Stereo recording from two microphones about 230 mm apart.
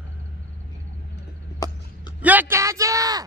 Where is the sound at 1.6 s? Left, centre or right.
Centre.